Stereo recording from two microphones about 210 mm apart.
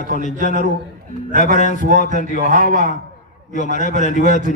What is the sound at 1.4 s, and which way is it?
A man's voice, 35° left (ahead or behind).